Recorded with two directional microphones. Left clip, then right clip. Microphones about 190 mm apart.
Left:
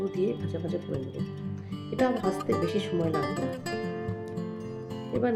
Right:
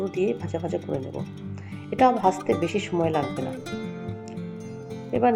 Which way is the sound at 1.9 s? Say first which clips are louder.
Right 8 dB; 5° right (ahead or behind).